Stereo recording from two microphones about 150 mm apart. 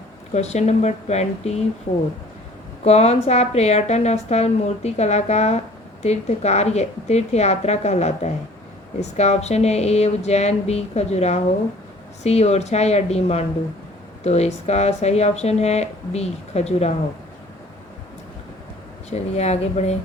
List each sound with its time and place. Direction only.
0.3 s a woman's voice: 50° left (ahead or behind)
2.8 s a woman's voice: 45° left (ahead or behind)
19.1 s a woman's voice: 45° left (ahead or behind)